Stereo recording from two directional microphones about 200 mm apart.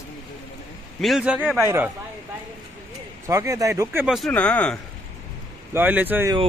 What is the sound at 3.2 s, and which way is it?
Speech, 15° right (ahead or behind).